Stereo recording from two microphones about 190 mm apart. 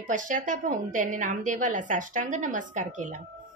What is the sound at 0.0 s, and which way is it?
Female singing, 45° right (ahead or behind).